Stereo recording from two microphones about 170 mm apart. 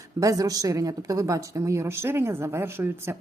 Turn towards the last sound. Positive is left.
turn(degrees=-15)  # may be behind; listen again after turning